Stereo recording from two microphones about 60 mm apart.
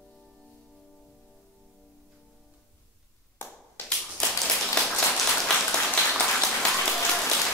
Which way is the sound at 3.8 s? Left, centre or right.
Left.